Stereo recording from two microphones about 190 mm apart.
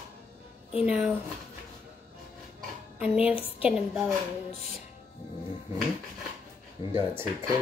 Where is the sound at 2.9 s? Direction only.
5° right (ahead or behind).